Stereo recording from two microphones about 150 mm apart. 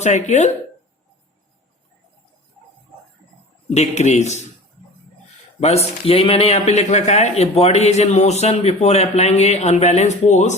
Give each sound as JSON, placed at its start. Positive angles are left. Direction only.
{"t": 0.0, "sound": "a man's voice", "side_deg": 50}
{"t": 3.7, "sound": "a man's voice", "side_deg": 50}
{"t": 5.5, "sound": "a man's voice", "side_deg": 45}